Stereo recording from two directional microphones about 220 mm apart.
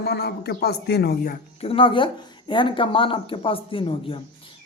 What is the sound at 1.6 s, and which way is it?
Speech, 25° left (ahead or behind).